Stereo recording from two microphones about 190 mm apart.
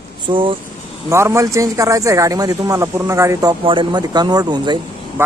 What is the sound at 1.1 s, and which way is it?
Speech, 15° right (ahead or behind).